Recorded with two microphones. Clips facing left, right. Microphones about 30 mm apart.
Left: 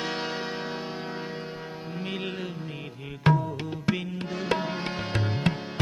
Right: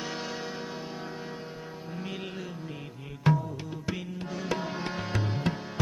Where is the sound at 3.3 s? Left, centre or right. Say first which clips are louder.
Left 3 dB; left.